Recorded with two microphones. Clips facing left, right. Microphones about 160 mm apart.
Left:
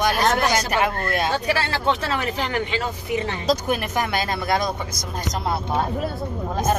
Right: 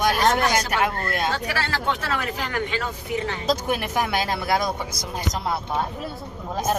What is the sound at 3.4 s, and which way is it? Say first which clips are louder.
Speech: left 2 dB; 5° right (ahead or behind).